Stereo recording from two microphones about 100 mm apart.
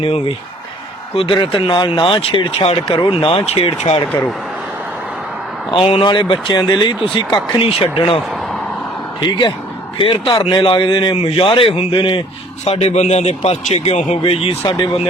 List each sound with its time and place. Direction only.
0.0 s a man's voice: 65° left (ahead or behind)
2.2 s speech: 65° left (ahead or behind)
5.7 s a man's voice: 70° left (ahead or behind)
6.6 s speech: 45° left (ahead or behind)
7.6 s a man's voice: 65° left (ahead or behind)
10.0 s a man's voice: 60° left (ahead or behind)
12.6 s a man's voice: 90° left; by 14.8 s 70° left (ahead or behind)